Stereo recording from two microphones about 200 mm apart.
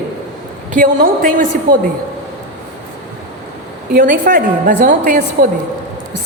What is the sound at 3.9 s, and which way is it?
A woman's voice, 40° right (ahead or behind).